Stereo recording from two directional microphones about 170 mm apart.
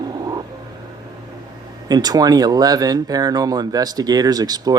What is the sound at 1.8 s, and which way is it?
Speech, 25° right (ahead or behind).